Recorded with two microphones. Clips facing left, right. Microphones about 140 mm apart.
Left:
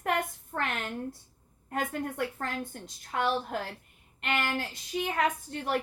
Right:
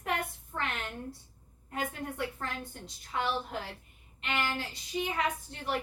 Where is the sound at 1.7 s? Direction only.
50° left (ahead or behind).